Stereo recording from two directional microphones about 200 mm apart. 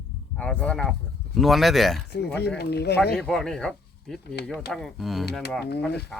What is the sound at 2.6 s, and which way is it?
Speech, 55° left (ahead or behind).